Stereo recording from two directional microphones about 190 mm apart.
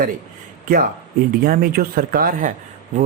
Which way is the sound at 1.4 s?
50° right (ahead or behind).